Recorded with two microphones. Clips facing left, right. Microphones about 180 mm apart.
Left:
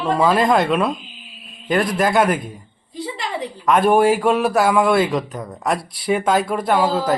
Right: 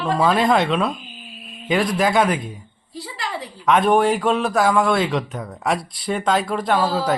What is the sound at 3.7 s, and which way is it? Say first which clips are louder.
Speech: left 2 dB; 5° left (ahead or behind).